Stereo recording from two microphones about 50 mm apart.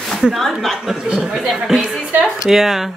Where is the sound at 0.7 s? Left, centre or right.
Centre.